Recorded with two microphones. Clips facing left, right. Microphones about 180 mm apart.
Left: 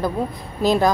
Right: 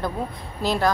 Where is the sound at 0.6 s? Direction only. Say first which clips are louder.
Left 6 dB; 15° left (ahead or behind).